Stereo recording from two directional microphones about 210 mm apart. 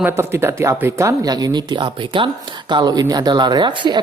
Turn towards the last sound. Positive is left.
turn(degrees=-20)  # may be behind; listen again after turning